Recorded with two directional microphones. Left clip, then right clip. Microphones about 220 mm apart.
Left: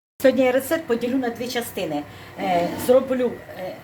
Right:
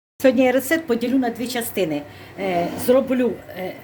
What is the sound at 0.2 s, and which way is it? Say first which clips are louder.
A woman's voice: right 1 dB; 15° right (ahead or behind).